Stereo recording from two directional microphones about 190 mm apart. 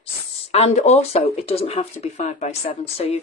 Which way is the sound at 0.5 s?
35° left (ahead or behind).